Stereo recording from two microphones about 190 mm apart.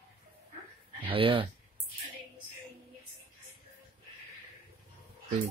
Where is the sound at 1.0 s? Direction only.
30° right (ahead or behind).